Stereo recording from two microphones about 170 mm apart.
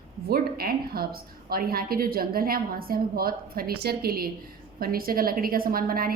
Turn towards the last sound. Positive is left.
turn(degrees=-60)  # may be behind; listen again after turning